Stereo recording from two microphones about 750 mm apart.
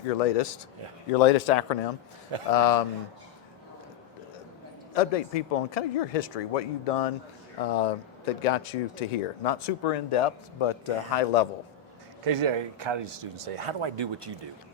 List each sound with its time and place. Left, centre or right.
0.2 s a man's voice: left
4.9 s a man's voice: left
12.2 s speech: right